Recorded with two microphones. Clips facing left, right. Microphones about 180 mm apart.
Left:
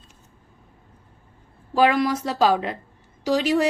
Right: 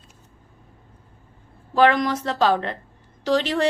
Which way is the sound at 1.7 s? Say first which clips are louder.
Right 1 dB; 10° left (ahead or behind).